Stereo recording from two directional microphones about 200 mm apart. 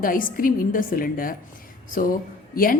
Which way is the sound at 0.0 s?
45° left (ahead or behind).